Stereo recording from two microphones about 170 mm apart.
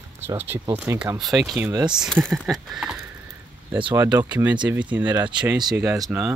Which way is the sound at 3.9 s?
20° right (ahead or behind).